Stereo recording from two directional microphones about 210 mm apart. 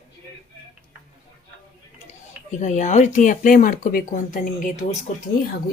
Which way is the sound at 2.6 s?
35° left (ahead or behind).